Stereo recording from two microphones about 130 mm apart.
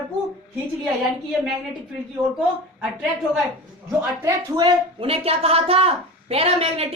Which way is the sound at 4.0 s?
20° right (ahead or behind).